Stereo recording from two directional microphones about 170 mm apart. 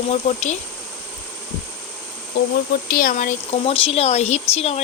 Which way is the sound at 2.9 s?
55° left (ahead or behind).